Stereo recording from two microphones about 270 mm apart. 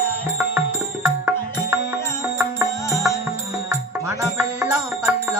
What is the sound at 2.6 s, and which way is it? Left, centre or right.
Music, centre.